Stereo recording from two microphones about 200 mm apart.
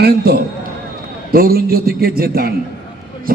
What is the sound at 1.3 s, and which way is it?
A man's voice, 50° right (ahead or behind).